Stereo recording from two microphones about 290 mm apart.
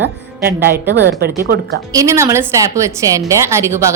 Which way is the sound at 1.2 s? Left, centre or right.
Right.